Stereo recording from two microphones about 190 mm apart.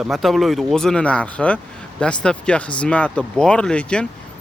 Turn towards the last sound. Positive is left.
turn(degrees=5)  # may be behind; listen again after turning